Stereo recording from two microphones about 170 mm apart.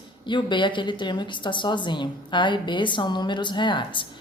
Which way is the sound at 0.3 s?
25° left (ahead or behind).